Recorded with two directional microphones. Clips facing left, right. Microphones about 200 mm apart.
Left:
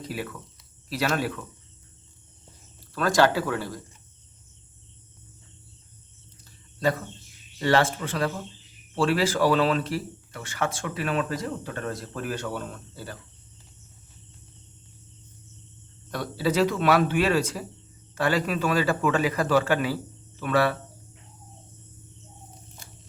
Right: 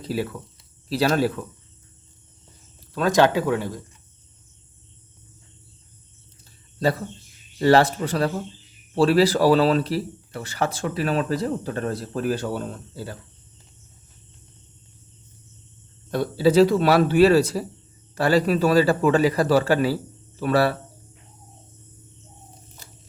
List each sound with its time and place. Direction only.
0.0 s speech: 30° right (ahead or behind)
2.9 s speech: 20° right (ahead or behind)
6.4 s a sound: 30° right (ahead or behind)
7.6 s speech: 35° right (ahead or behind)
16.1 s speech: 30° right (ahead or behind)